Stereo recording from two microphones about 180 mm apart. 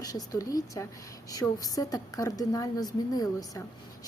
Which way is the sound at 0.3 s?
20° left (ahead or behind).